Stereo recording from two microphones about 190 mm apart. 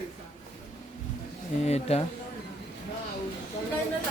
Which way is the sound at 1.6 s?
35° left (ahead or behind).